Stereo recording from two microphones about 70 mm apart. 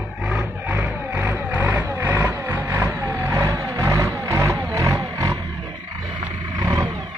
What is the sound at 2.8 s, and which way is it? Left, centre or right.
Vehicle, right.